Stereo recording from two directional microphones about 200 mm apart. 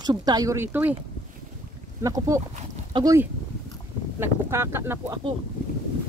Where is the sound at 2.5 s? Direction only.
35° right (ahead or behind).